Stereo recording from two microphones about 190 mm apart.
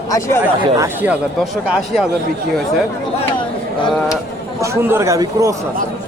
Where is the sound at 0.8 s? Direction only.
10° right (ahead or behind).